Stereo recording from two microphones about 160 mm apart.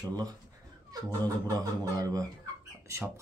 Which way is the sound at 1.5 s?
25° right (ahead or behind).